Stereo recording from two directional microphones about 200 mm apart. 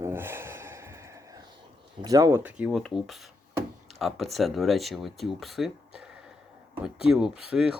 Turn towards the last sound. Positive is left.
turn(degrees=-5)  # may be behind; listen again after turning